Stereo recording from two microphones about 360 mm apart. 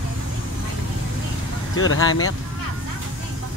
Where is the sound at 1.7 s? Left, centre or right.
Left.